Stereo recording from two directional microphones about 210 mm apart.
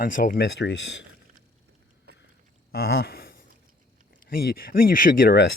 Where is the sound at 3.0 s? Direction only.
45° left (ahead or behind).